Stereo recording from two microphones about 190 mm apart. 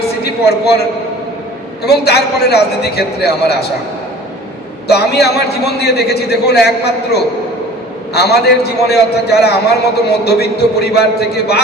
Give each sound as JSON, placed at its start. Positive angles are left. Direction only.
{"t": 0.3, "sound": "a man's voice", "side_deg": 60}
{"t": 1.8, "sound": "a man's voice", "side_deg": 60}
{"t": 4.9, "sound": "a man's voice", "side_deg": 60}